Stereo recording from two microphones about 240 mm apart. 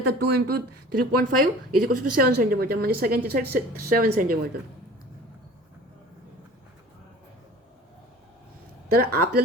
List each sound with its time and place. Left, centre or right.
0.0 s speech: right
1.1 s speech: right
8.9 s speech: right